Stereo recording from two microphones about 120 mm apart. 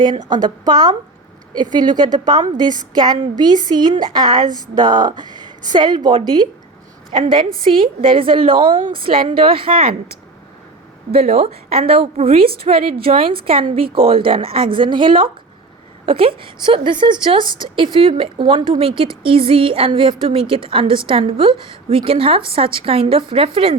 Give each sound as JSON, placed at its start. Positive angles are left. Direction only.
{"t": 0.0, "sound": "a woman's voice", "side_deg": -40}
{"t": 11.1, "sound": "a woman's voice", "side_deg": -55}